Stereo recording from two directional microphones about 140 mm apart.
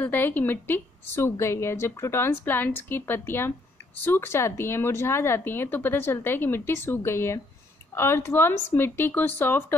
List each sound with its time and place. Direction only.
0.0 s speech: 15° left (ahead or behind)